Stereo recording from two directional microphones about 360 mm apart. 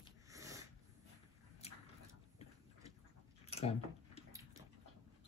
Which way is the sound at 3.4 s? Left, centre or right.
Centre.